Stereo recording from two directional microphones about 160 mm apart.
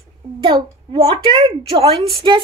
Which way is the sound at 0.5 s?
35° right (ahead or behind).